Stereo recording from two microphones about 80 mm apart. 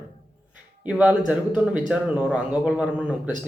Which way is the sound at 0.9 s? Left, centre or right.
Centre.